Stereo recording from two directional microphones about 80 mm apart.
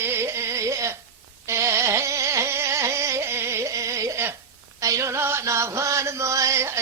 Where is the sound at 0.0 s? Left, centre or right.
Right.